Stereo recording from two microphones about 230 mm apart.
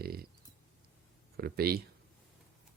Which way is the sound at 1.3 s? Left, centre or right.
Right.